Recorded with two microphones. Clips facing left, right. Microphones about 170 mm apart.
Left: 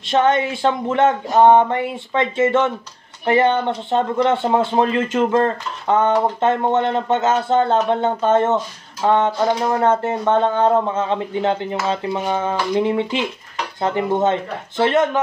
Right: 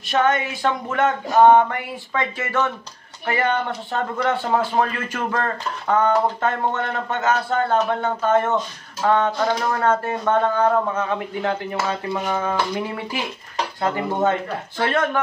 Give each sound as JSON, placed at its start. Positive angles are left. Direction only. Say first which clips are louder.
{"t": 0.0, "sound": "a man's voice", "louder": "left 3 dB", "side_deg": 25}